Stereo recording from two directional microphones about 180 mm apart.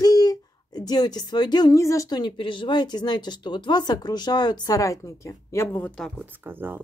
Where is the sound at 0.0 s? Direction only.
20° left (ahead or behind); by 6.2 s 5° left (ahead or behind).